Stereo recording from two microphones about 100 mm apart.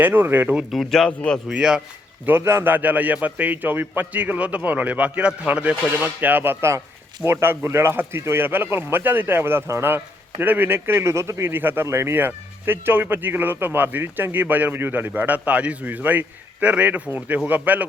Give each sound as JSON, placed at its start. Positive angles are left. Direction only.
{"t": 0.0, "sound": "speech", "side_deg": -20}
{"t": 0.7, "sound": "speech", "side_deg": 0}
{"t": 1.5, "sound": "speech", "side_deg": -5}
{"t": 2.2, "sound": "a man's voice", "side_deg": -25}